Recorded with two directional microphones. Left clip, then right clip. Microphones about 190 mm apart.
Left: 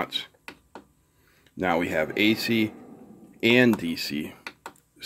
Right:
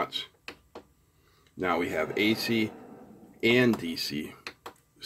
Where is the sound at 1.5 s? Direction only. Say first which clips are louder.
Left 4 dB; 35° left (ahead or behind).